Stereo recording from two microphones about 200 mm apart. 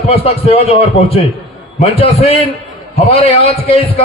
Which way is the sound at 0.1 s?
30° left (ahead or behind).